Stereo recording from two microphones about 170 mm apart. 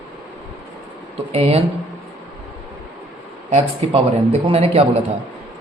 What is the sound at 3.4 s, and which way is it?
Speech, 40° right (ahead or behind).